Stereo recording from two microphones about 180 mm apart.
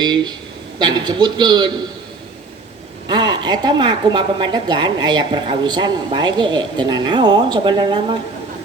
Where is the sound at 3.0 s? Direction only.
25° right (ahead or behind).